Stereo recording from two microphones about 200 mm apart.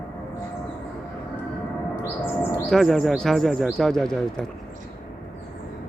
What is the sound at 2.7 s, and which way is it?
A man's voice, centre (ahead or behind).